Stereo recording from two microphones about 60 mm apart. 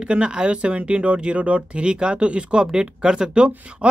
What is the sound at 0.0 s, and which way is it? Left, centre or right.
Speech, centre.